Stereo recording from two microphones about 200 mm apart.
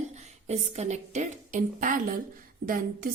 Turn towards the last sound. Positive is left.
turn(degrees=-45)  # may be behind; listen again after turning